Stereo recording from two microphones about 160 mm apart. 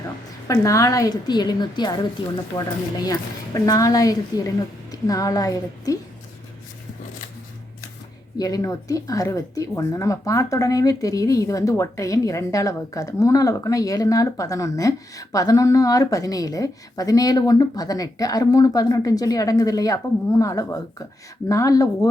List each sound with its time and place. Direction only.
0.4 s speech: 20° left (ahead or behind)
8.4 s speech: 20° left (ahead or behind)